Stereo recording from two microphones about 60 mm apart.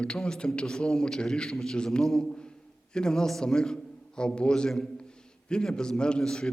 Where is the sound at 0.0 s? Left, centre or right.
Centre.